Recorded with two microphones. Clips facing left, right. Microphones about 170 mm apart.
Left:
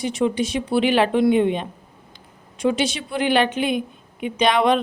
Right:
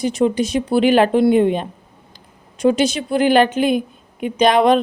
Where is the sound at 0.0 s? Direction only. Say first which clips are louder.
Right 4 dB; 40° right (ahead or behind).